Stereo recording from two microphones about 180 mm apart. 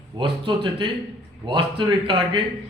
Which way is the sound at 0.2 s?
25° right (ahead or behind).